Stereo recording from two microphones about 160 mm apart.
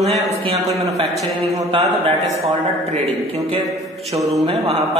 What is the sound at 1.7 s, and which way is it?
A man's voice, 35° right (ahead or behind).